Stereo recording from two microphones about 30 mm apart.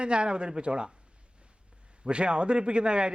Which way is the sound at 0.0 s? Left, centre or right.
Right.